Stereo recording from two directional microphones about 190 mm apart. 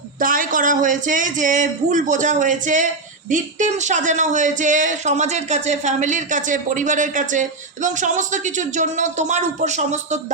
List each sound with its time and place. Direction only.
0.2 s speech: 45° right (ahead or behind)